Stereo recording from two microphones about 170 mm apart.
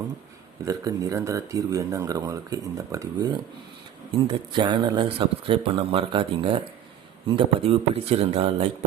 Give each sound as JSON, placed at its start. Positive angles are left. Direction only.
{"t": 0.6, "sound": "speech", "side_deg": -20}